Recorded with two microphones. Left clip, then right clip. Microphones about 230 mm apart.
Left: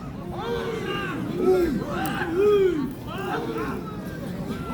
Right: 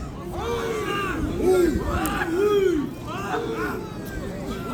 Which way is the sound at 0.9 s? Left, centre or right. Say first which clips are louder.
Right 3 dB; right.